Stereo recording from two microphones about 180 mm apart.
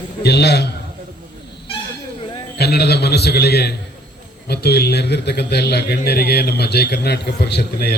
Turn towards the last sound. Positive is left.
turn(degrees=65)  # may be behind; listen again after turning